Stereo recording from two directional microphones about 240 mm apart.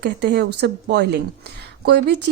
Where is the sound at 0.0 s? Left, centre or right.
Right.